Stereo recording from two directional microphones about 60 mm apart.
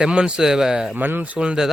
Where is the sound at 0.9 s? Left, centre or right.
Right.